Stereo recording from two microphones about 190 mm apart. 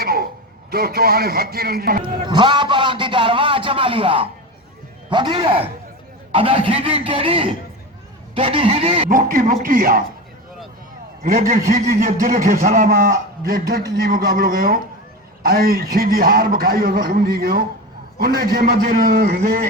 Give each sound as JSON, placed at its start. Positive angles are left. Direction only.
{"t": 0.0, "sound": "a sound", "side_deg": -50}
{"t": 0.7, "sound": "a man's voice", "side_deg": -55}
{"t": 2.2, "sound": "a man's voice", "side_deg": -25}
{"t": 9.0, "sound": "a man's voice", "side_deg": -45}
{"t": 11.2, "sound": "a man's voice", "side_deg": -45}